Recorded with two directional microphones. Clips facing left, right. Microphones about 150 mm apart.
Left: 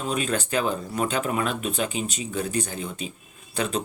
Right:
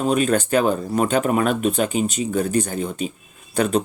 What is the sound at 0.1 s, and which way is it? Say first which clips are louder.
Speech: right 6 dB; 45° right (ahead or behind).